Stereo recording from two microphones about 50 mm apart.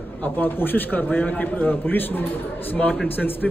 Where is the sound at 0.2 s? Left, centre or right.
Left.